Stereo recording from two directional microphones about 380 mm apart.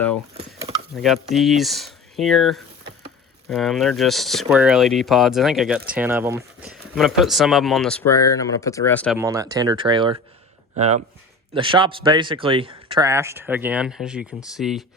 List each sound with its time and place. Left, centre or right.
0.9 s speech: centre
9.1 s speech: centre